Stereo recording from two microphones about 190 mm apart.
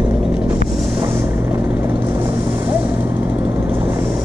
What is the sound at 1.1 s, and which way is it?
Vehicle, 10° right (ahead or behind).